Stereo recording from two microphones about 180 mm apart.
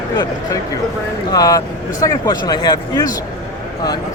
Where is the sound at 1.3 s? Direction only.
20° left (ahead or behind).